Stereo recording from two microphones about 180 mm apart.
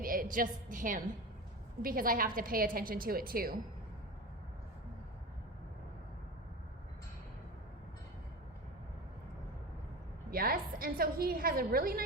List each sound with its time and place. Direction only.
0.0 s a woman's voice: 50° right (ahead or behind)
10.3 s a woman's voice: 55° right (ahead or behind)